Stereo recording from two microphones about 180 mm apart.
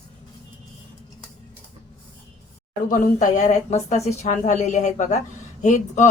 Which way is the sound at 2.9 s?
45° left (ahead or behind).